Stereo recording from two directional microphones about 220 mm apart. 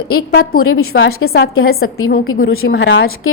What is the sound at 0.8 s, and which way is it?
Speech, 65° left (ahead or behind).